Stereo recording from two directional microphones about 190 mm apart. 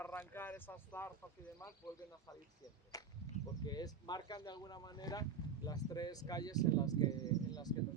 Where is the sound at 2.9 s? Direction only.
20° left (ahead or behind).